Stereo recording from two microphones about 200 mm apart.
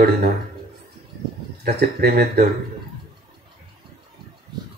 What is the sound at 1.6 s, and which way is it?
Speech, 50° right (ahead or behind).